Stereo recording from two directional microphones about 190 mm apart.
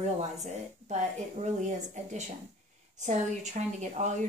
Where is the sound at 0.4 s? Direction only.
35° right (ahead or behind).